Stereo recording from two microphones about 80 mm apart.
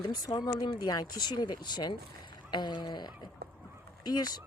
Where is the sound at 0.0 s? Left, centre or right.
Left.